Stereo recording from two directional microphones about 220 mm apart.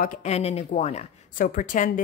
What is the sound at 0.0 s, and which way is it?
Speech, 35° left (ahead or behind).